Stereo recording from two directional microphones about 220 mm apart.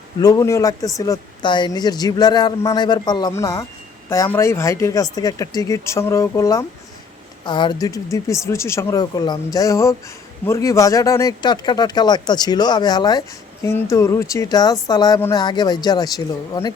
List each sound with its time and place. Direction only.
0.2 s speech: 15° left (ahead or behind)